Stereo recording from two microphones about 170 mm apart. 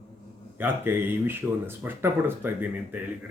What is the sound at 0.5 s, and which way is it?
A man's voice, 10° right (ahead or behind).